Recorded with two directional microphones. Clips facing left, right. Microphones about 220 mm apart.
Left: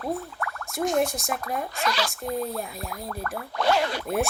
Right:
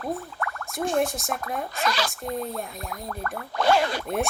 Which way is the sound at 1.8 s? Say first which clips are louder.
Right 2 dB; 45° right (ahead or behind).